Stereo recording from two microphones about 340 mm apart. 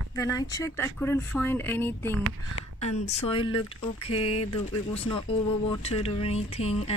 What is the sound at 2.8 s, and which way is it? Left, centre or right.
Speech, centre.